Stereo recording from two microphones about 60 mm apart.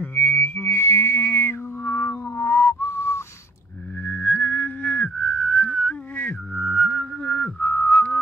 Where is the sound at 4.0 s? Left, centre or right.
Left.